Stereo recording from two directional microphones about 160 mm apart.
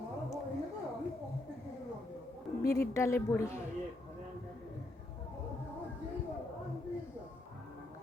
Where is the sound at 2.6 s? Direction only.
70° left (ahead or behind).